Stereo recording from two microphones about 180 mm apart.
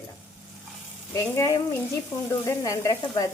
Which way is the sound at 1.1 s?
15° left (ahead or behind).